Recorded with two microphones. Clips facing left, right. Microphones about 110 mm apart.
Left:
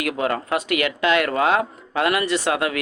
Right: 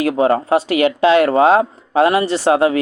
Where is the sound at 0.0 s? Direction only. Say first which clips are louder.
Right 8 dB; 30° right (ahead or behind).